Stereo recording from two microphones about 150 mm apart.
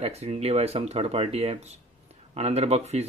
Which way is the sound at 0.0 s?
45° right (ahead or behind).